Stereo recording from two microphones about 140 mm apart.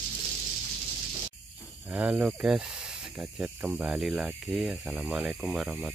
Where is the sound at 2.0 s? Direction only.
10° right (ahead or behind).